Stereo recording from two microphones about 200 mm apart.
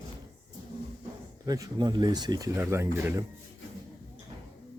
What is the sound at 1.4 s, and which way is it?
Speech, 15° right (ahead or behind).